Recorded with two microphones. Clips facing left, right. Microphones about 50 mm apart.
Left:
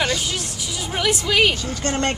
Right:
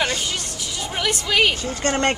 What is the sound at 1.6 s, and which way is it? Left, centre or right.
Speech, right.